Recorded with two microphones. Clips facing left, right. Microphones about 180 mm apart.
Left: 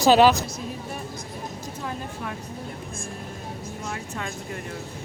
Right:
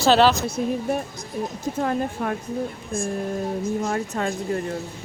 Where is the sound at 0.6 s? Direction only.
55° right (ahead or behind).